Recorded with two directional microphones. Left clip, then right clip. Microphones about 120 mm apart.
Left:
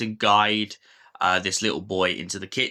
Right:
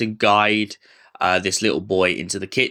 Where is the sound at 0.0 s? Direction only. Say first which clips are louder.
Right 3 dB; 30° right (ahead or behind).